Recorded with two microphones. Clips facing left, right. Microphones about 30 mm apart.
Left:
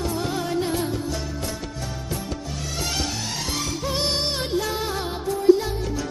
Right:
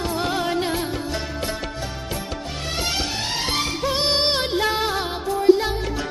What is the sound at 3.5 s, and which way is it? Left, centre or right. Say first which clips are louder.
Music: right 5 dB; right.